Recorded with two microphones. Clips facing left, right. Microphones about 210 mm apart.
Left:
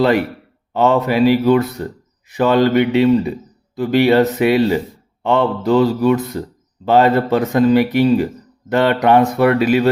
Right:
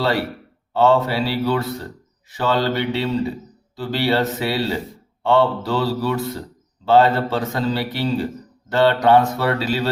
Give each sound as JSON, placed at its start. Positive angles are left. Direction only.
{"t": 0.0, "sound": "a man's voice", "side_deg": 20}
{"t": 5.2, "sound": "mantra", "side_deg": 20}
{"t": 6.8, "sound": "a man's voice", "side_deg": 20}